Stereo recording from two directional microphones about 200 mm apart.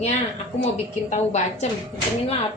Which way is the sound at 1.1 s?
35° left (ahead or behind).